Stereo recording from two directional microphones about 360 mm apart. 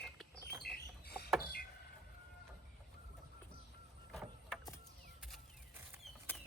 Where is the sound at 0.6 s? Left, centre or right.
Left.